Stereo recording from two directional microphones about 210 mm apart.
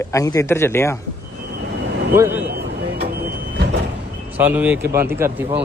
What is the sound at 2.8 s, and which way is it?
Vehicle, 50° right (ahead or behind).